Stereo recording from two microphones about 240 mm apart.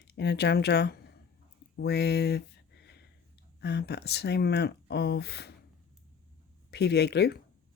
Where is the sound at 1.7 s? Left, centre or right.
Left.